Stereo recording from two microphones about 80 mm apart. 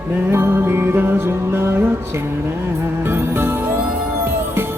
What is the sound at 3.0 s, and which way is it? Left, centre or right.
Music, right.